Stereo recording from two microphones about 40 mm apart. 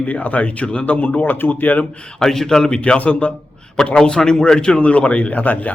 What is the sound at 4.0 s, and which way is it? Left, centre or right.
Speech, centre.